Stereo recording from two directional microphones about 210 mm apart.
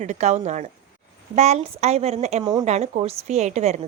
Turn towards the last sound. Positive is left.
turn(degrees=-30)  # may be behind; listen again after turning